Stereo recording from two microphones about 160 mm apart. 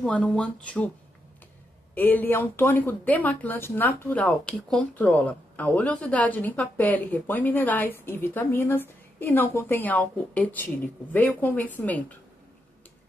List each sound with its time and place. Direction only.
0.0 s speech: 5° left (ahead or behind)
2.0 s speech: 10° left (ahead or behind)